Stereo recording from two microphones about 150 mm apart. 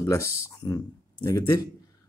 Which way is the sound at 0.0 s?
20° left (ahead or behind).